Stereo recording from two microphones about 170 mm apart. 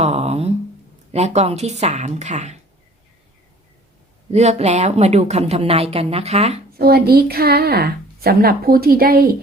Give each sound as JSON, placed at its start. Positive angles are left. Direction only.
{"t": 0.0, "sound": "a sound", "side_deg": -40}
{"t": 1.1, "sound": "speech", "side_deg": -40}
{"t": 4.3, "sound": "speech", "side_deg": -40}
{"t": 6.7, "sound": "a woman's voice", "side_deg": -65}